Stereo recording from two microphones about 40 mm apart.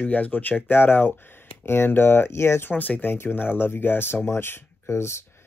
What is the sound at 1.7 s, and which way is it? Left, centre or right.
Speech, left.